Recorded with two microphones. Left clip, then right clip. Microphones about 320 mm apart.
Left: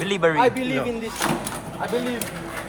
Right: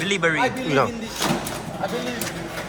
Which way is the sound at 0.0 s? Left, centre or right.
Centre.